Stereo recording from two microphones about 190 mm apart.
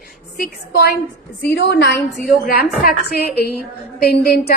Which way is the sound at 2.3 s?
50° left (ahead or behind).